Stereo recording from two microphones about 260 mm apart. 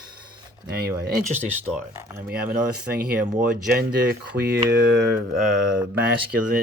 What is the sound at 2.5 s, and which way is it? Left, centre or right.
Speech, right.